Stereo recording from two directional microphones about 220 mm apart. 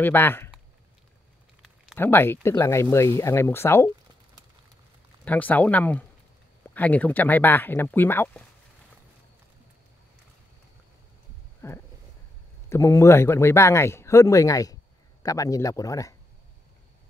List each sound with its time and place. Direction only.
0.0 s speech: 10° left (ahead or behind)
1.6 s a sound: 5° left (ahead or behind)
2.4 s speech: 10° left (ahead or behind)
5.2 s speech: 5° left (ahead or behind)
11.6 s a sound: 15° left (ahead or behind)
12.6 s speech: 10° left (ahead or behind)